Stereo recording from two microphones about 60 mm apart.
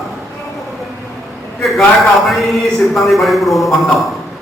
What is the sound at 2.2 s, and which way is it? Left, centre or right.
A man's voice, centre.